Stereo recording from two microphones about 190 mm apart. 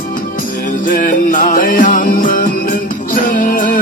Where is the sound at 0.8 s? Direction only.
45° left (ahead or behind).